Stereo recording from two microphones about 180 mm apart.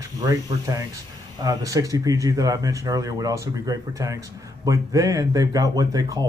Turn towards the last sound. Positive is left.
turn(degrees=-20)  # may be behind; listen again after turning